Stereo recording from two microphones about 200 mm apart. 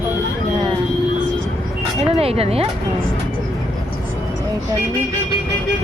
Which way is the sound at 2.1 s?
30° right (ahead or behind).